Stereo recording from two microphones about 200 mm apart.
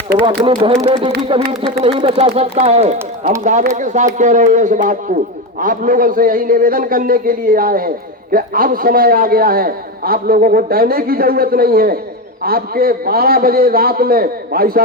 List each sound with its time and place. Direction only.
0.3 s a man's voice: 25° right (ahead or behind); by 14.8 s 50° right (ahead or behind)